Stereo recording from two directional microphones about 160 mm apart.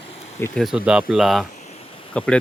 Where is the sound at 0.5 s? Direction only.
5° right (ahead or behind).